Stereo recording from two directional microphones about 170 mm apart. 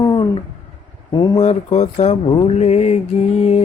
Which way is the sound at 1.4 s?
40° left (ahead or behind).